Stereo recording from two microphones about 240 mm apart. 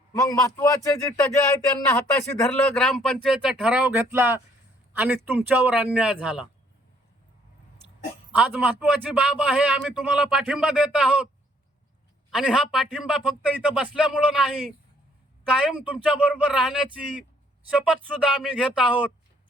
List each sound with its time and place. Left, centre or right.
0.2 s a man's voice: centre
8.4 s a man's voice: centre
12.3 s a man's voice: centre